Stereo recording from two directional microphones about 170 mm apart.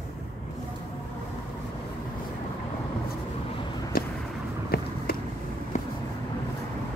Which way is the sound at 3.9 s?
60° left (ahead or behind).